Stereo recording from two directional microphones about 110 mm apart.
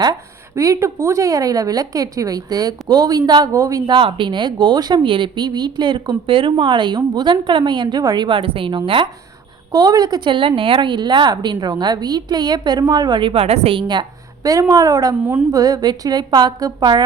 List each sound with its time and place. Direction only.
0.0 s speech: 30° right (ahead or behind)
3.8 s speech: 45° right (ahead or behind)
9.7 s speech: 35° right (ahead or behind); by 13.8 s 60° right (ahead or behind)
13.8 s a woman's voice: 40° right (ahead or behind)